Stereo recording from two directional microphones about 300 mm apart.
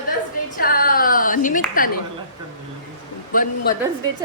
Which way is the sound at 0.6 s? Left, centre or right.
Left.